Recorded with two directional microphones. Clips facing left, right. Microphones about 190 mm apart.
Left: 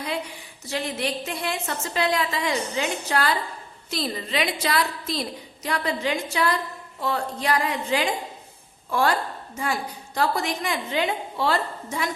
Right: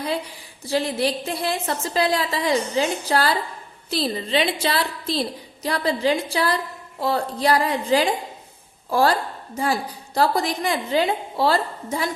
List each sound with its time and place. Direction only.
0.6 s a woman's voice: 35° right (ahead or behind)